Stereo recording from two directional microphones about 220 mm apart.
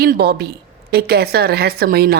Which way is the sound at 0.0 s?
45° right (ahead or behind).